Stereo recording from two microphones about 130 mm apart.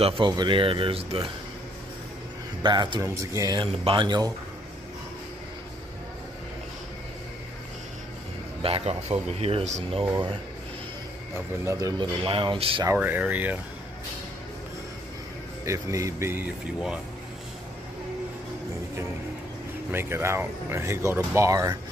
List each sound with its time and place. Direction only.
0.0 s speech: 35° right (ahead or behind)
2.6 s speech: 35° right (ahead or behind)
3.0 s speech: 25° right (ahead or behind)
3.8 s speech: 40° right (ahead or behind)
8.6 s speech: 50° right (ahead or behind)
11.6 s speech: 25° right (ahead or behind)
12.2 s speech: 40° right (ahead or behind)
12.8 s speech: 15° right (ahead or behind)
15.6 s speech: 25° right (ahead or behind)
19.9 s speech: 20° right (ahead or behind)